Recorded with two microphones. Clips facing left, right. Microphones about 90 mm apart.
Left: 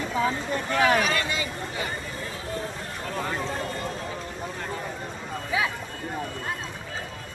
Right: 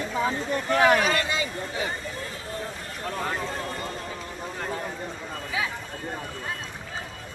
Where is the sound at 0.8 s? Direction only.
30° right (ahead or behind).